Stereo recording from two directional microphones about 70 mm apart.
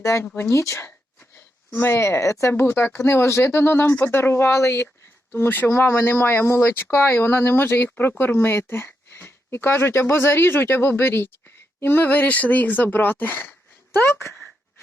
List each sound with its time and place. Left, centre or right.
0.0 s speech: left
1.7 s speech: left
2.5 s speech: left
5.3 s speech: left